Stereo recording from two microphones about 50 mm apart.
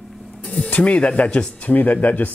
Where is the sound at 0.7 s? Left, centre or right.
Left.